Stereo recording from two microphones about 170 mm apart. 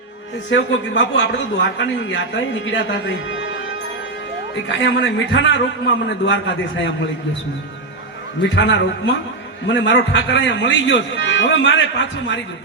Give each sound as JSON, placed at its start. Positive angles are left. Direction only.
{"t": 0.5, "sound": "a man's voice", "side_deg": 90}
{"t": 4.7, "sound": "a man's voice", "side_deg": 90}
{"t": 8.4, "sound": "a man's voice", "side_deg": 90}